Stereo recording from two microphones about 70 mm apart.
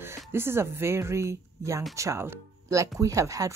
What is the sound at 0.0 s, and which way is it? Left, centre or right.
Speech, right.